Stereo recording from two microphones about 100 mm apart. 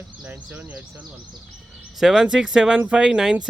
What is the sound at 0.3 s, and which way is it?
Speech, 20° right (ahead or behind).